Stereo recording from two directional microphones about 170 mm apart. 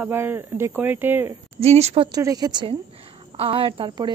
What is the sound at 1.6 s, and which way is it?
Speech, 40° right (ahead or behind).